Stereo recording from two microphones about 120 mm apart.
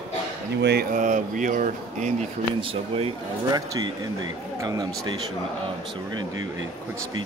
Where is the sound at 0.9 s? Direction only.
90° right.